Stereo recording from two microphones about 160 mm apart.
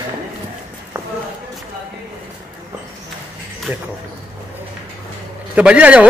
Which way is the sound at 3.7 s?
10° right (ahead or behind).